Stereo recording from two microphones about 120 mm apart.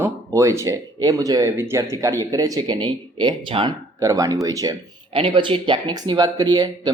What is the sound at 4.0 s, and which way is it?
Speech, 30° right (ahead or behind).